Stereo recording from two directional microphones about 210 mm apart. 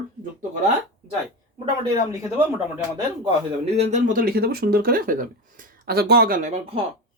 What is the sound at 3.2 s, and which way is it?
Speech, 30° right (ahead or behind).